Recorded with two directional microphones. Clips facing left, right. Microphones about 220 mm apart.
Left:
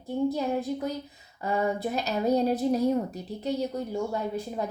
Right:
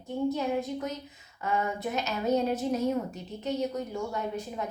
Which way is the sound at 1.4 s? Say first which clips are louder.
Left 3 dB; 35° left (ahead or behind).